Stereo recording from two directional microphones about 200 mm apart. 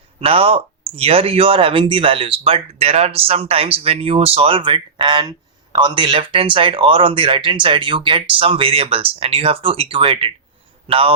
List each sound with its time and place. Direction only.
0.2 s a man's voice: 30° right (ahead or behind)